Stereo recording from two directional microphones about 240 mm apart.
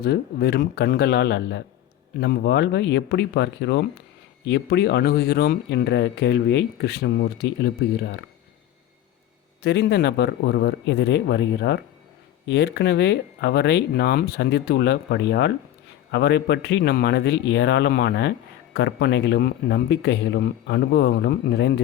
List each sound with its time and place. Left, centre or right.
0.0 s speech: left
9.6 s speech: left